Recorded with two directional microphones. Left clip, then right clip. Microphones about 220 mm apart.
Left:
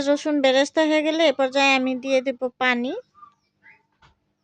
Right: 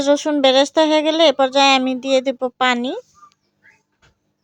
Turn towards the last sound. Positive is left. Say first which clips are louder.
# right 4 dB
turn(degrees=-10)  # may be behind; listen again after turning